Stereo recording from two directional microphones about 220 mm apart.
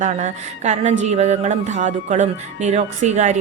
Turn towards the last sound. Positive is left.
turn(degrees=-35)  # may be behind; listen again after turning